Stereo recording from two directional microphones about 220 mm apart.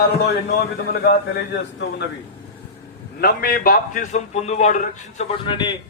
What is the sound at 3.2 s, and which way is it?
A man's voice, 45° left (ahead or behind).